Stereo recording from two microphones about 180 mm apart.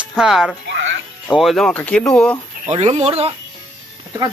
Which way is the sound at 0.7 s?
90° right.